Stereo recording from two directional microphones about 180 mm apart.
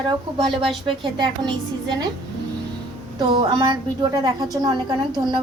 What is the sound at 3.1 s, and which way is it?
A woman's voice, 25° right (ahead or behind).